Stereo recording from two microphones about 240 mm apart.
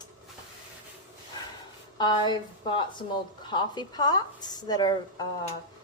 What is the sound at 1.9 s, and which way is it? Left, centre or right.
A woman's voice, centre.